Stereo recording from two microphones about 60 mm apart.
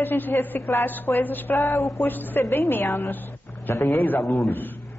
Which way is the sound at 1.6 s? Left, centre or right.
Left.